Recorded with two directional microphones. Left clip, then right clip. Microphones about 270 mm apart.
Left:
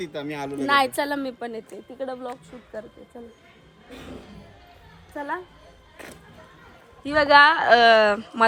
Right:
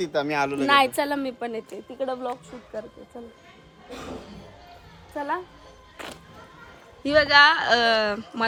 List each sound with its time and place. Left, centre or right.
0.0 s speech: right
0.6 s a woman's voice: centre
3.8 s music: right
5.1 s a woman's voice: centre
7.1 s a woman's voice: centre